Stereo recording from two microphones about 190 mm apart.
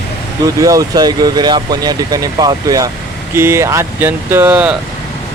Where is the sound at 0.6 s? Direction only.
15° right (ahead or behind).